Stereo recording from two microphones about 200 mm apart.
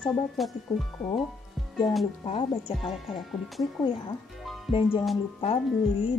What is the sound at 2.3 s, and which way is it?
Speech, 25° left (ahead or behind).